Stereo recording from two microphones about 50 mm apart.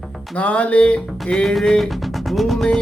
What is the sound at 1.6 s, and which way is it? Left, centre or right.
Music, centre.